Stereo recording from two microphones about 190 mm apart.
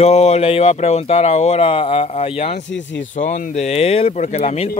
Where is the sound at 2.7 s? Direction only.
75° left (ahead or behind).